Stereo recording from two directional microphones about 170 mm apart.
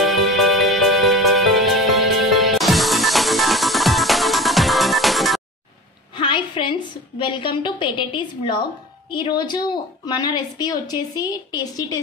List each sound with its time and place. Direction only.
0.0 s music: centre (ahead or behind)
6.1 s a sound: 30° left (ahead or behind)
9.1 s a woman's voice: 25° left (ahead or behind)